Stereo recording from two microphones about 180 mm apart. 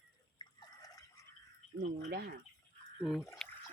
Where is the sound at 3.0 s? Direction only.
Centre (ahead or behind).